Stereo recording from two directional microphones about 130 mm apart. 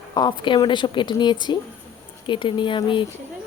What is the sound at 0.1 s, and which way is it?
Speech, 35° left (ahead or behind).